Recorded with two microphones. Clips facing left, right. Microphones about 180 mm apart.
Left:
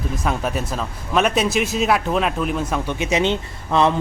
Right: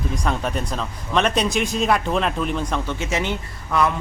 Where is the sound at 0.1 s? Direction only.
5° left (ahead or behind).